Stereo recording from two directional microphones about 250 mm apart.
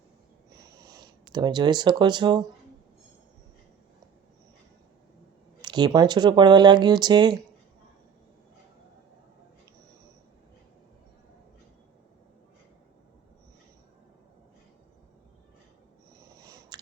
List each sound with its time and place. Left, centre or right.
1.3 s speech: centre
5.6 s speech: centre
16.4 s a sound: centre